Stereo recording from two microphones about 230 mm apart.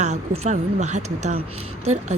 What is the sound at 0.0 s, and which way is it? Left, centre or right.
Speech, right.